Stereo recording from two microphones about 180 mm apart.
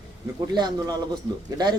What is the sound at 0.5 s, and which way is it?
Speech, 25° right (ahead or behind).